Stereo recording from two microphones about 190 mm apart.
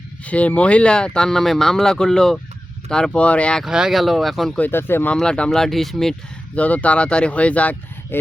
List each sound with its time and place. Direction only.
0.3 s speech: 5° left (ahead or behind)